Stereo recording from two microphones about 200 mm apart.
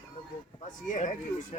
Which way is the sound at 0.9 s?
40° left (ahead or behind).